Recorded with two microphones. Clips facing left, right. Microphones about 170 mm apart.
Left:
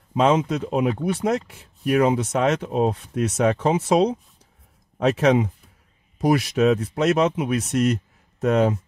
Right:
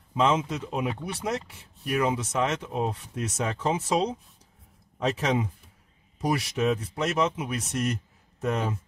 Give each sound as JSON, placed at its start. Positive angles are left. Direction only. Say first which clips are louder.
{"t": 0.2, "sound": "speech", "louder": "left 5 dB", "side_deg": 60}